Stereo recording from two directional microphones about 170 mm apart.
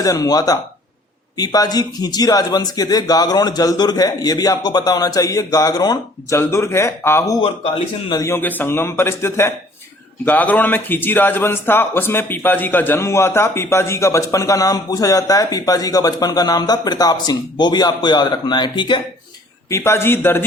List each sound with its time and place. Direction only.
0.0 s a man's voice: 20° left (ahead or behind)
19.7 s a man's voice: 15° left (ahead or behind)